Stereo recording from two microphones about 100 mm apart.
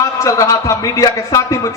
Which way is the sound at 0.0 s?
30° left (ahead or behind).